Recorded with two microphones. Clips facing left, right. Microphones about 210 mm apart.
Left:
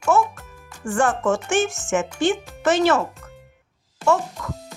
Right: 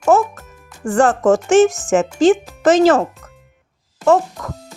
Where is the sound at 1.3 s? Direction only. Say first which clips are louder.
Right 9 dB; 90° right.